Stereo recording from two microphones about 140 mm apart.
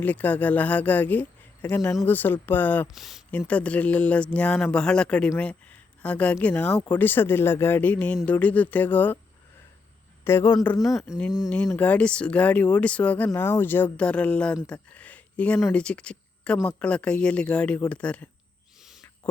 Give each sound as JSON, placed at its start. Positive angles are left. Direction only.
{"t": 0.0, "sound": "speech", "side_deg": 10}
{"t": 2.9, "sound": "speech", "side_deg": 0}
{"t": 3.3, "sound": "speech", "side_deg": 10}
{"t": 10.2, "sound": "speech", "side_deg": 20}
{"t": 10.8, "sound": "speech", "side_deg": 0}
{"t": 11.4, "sound": "speech", "side_deg": 15}
{"t": 19.2, "sound": "a sound", "side_deg": 10}